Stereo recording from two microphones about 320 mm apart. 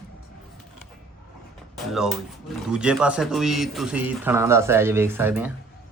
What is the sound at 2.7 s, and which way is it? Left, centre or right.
A man's voice, centre.